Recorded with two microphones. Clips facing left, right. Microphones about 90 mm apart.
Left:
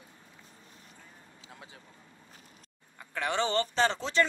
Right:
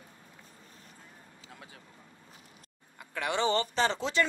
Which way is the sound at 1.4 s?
25° left (ahead or behind).